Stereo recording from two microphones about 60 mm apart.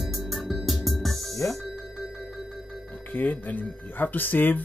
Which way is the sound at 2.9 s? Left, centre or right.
Left.